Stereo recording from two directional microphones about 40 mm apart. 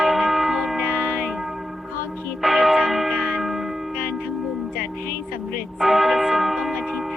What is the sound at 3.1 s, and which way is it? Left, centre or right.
Church bell, right.